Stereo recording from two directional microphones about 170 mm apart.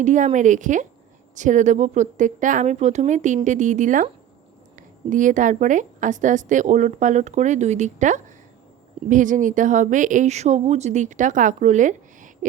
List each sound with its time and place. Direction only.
0.0 s a woman's voice: 45° right (ahead or behind)